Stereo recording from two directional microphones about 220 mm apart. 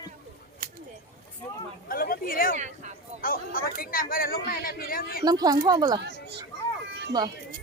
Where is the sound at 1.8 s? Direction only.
40° left (ahead or behind).